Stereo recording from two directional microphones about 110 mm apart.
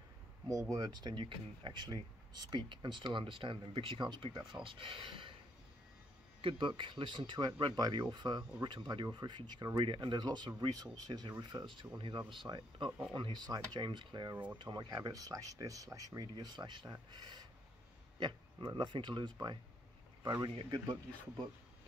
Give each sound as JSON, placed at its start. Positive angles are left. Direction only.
{"t": 0.5, "sound": "speech", "side_deg": -30}
{"t": 4.6, "sound": "speech", "side_deg": -50}
{"t": 6.8, "sound": "speech", "side_deg": -45}